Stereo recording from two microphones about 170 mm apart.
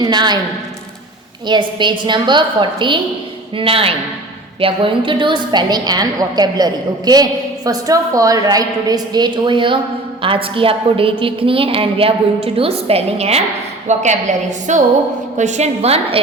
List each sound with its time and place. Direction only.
0.0 s a woman's voice: 25° right (ahead or behind)
1.5 s a woman's voice: 25° right (ahead or behind)